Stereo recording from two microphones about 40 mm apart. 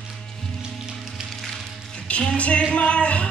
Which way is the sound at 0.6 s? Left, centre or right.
Centre.